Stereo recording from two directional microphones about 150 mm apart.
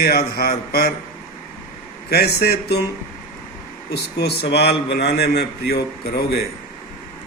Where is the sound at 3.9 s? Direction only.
90° left.